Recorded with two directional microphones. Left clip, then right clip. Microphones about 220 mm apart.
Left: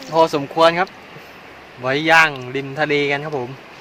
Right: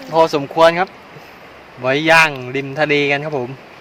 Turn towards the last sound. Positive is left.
turn(degrees=-25)  # may be behind; listen again after turning